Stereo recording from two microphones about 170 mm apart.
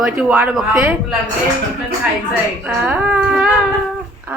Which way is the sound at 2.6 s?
10° right (ahead or behind).